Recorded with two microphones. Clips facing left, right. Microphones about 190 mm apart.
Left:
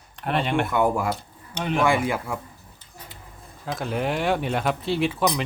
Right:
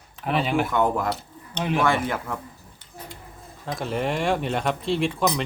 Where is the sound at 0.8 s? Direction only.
10° left (ahead or behind).